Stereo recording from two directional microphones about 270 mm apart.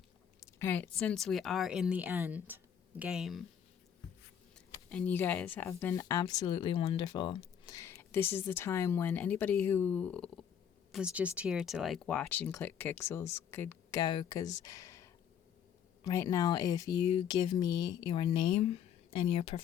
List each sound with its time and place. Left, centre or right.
0.6 s speech: centre
4.7 s speech: centre
14.6 s a sound: centre
16.0 s speech: centre